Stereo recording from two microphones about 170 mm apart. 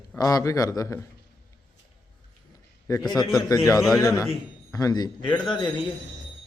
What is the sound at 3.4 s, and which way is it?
Speech, 20° left (ahead or behind).